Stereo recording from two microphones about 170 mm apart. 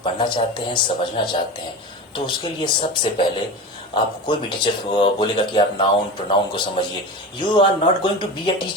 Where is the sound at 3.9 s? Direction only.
30° left (ahead or behind).